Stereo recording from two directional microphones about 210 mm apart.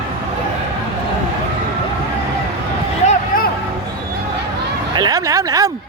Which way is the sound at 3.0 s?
30° left (ahead or behind).